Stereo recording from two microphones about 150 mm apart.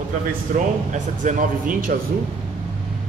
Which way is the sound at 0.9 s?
60° right (ahead or behind).